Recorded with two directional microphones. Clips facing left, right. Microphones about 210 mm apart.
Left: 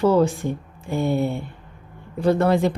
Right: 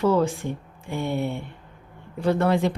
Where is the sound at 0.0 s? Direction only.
35° left (ahead or behind).